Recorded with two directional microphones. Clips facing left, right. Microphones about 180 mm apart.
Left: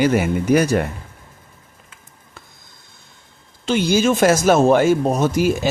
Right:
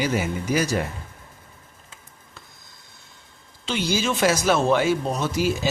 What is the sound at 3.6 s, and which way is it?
Speech, 50° left (ahead or behind).